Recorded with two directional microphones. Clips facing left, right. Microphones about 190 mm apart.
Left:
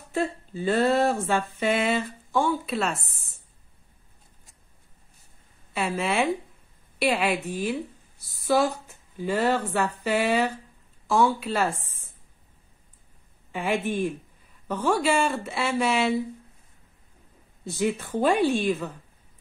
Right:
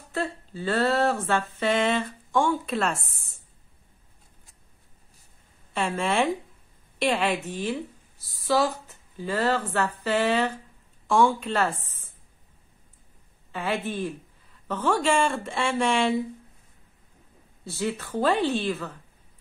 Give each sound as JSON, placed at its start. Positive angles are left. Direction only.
{"t": 0.1, "sound": "speech", "side_deg": 15}
{"t": 5.8, "sound": "speech", "side_deg": 5}
{"t": 13.5, "sound": "speech", "side_deg": 15}
{"t": 17.6, "sound": "speech", "side_deg": 15}